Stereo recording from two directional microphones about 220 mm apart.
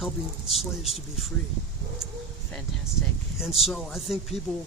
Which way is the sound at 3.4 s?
Centre (ahead or behind).